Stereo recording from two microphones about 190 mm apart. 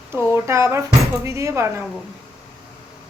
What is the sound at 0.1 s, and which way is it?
A woman's voice, 15° right (ahead or behind).